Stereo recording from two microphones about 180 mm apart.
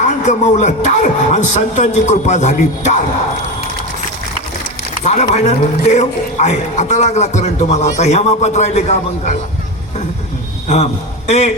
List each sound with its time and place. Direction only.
0.3 s a man's voice: 40° left (ahead or behind)
5.0 s a man's voice: 40° left (ahead or behind)
11.3 s a man's voice: 40° left (ahead or behind)